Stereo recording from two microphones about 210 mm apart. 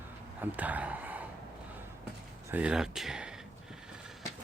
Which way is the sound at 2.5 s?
5° right (ahead or behind).